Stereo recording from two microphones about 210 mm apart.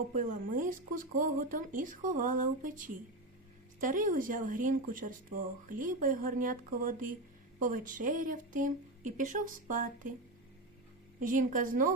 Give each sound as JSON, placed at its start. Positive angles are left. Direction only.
{"t": 0.1, "sound": "speech", "side_deg": -35}
{"t": 11.2, "sound": "speech", "side_deg": -40}